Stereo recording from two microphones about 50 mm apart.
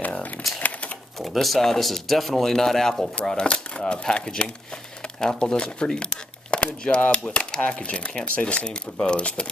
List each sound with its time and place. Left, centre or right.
0.6 s typewriter: left
1.2 s speech: centre; by 9.5 s left